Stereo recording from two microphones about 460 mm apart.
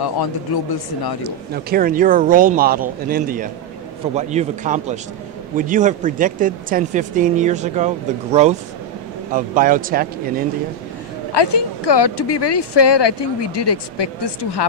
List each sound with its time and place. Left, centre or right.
0.0 s speech: left
1.5 s speech: centre
11.3 s speech: left